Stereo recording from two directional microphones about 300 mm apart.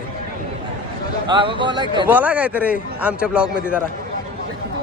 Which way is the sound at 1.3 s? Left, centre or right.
Centre.